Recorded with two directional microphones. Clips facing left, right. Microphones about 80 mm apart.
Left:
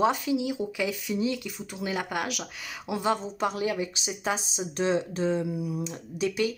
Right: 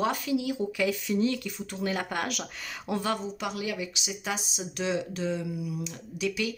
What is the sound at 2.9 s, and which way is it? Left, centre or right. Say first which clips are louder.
Speech: left 3 dB; centre.